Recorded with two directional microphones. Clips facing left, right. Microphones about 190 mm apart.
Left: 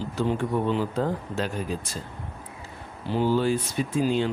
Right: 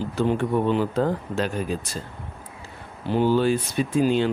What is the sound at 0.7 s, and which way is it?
Speech, 65° right (ahead or behind).